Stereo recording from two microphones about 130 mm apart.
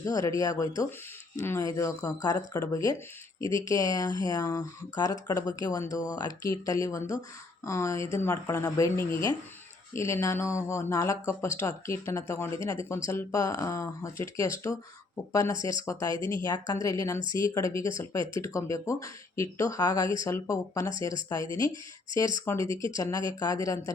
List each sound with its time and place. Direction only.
0.0 s speech: 25° left (ahead or behind)